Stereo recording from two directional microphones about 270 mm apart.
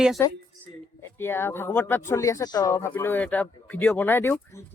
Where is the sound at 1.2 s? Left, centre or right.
Centre.